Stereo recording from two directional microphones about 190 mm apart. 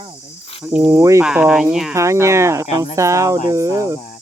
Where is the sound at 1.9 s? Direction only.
15° right (ahead or behind).